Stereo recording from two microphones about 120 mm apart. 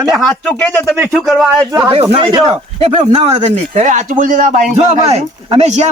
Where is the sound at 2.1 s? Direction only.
45° right (ahead or behind).